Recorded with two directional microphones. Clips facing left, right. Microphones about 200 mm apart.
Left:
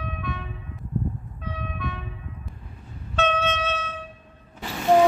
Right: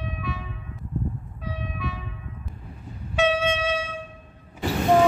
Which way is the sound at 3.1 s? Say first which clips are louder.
Right 2 dB; 10° right (ahead or behind).